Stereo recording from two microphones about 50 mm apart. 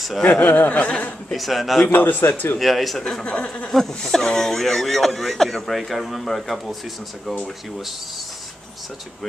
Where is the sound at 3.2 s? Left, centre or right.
Left.